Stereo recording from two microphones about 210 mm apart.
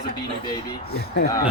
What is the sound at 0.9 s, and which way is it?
Speech, 50° left (ahead or behind).